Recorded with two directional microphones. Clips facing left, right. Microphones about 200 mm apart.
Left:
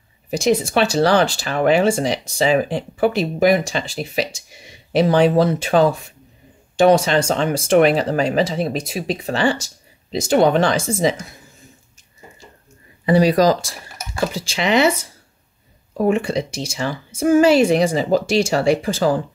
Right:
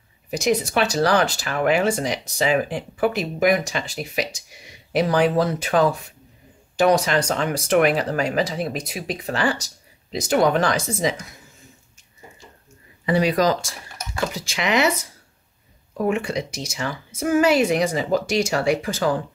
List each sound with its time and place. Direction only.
0.3 s speech: 30° left (ahead or behind)
13.0 s speech: 35° left (ahead or behind)
16.0 s speech: 30° left (ahead or behind)